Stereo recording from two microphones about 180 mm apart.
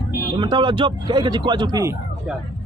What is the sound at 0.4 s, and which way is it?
A man's voice, 25° right (ahead or behind).